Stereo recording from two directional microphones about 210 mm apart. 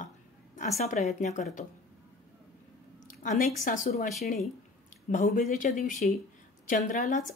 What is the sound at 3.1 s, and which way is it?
A woman's voice, 40° left (ahead or behind).